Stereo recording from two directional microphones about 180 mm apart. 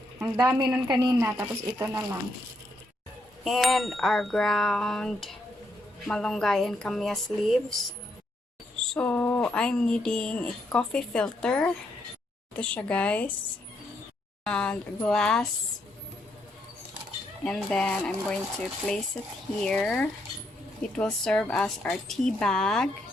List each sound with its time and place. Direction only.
0.2 s a woman's voice: 20° right (ahead or behind)
3.4 s speech: centre (ahead or behind)
14.4 s speech: 5° left (ahead or behind)
17.4 s speech: 5° left (ahead or behind)
19.5 s speech: 5° left (ahead or behind)